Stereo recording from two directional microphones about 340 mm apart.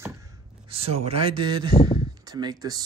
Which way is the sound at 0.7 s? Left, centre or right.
Centre.